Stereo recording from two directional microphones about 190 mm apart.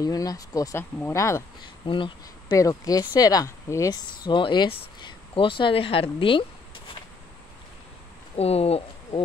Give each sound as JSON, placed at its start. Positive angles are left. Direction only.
{"t": 0.0, "sound": "speech", "side_deg": 20}
{"t": 1.9, "sound": "speech", "side_deg": 25}
{"t": 8.4, "sound": "speech", "side_deg": 30}